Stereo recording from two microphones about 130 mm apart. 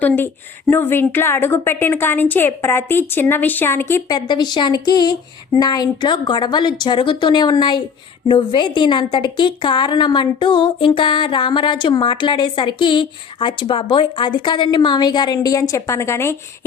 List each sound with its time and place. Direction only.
0.7 s a woman's voice: 15° left (ahead or behind)
4.1 s a woman's voice: 35° left (ahead or behind)